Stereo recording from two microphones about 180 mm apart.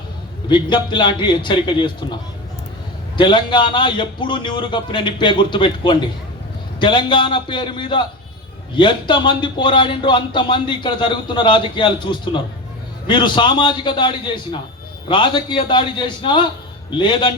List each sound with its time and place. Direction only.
0.4 s a man's voice: 25° left (ahead or behind)
3.2 s a man's voice: 25° left (ahead or behind)